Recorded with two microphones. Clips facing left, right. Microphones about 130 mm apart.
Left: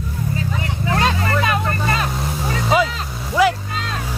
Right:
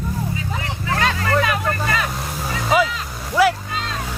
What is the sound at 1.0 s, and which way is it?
Vehicle, 25° left (ahead or behind).